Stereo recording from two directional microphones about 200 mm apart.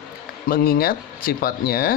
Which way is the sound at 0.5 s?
50° left (ahead or behind).